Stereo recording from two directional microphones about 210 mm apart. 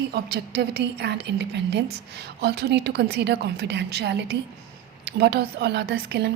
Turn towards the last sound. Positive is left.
turn(degrees=-50)  # may be behind; listen again after turning